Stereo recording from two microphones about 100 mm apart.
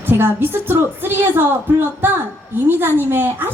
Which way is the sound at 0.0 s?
20° right (ahead or behind).